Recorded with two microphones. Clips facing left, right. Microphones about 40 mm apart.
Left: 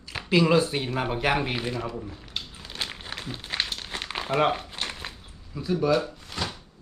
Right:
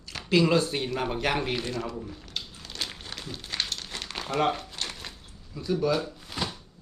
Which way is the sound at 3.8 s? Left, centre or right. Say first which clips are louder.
Left 3 dB; left.